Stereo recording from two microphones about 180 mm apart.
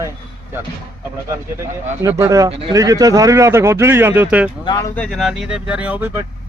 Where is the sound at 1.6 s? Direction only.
15° right (ahead or behind).